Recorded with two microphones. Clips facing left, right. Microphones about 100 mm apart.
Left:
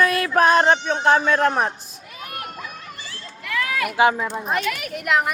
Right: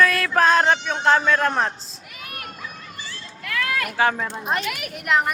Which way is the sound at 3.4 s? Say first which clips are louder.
Left 1 dB; 10° left (ahead or behind).